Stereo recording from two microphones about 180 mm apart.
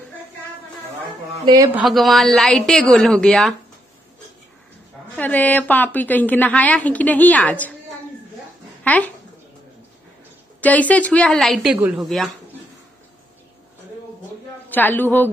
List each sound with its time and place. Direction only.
1.4 s speech: 25° right (ahead or behind)
1.7 s a woman's voice: 5° right (ahead or behind)
5.1 s a woman's voice: 10° left (ahead or behind)
8.8 s speech: 10° left (ahead or behind)
10.6 s a woman's voice: 10° left (ahead or behind)
14.7 s a woman's voice: 10° left (ahead or behind)